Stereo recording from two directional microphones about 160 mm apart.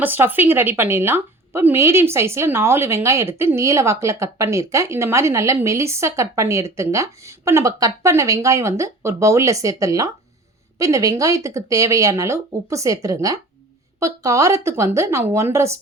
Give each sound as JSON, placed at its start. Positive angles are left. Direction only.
{"t": 0.0, "sound": "a woman's voice", "side_deg": -10}